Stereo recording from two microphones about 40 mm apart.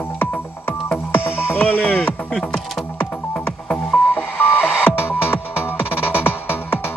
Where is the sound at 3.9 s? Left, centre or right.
Left.